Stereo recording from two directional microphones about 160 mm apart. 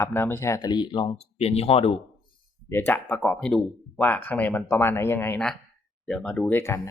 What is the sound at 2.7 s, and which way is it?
Speech, 15° left (ahead or behind).